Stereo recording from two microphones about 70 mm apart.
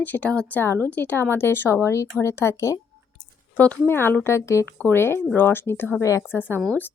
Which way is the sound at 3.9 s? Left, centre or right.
Left.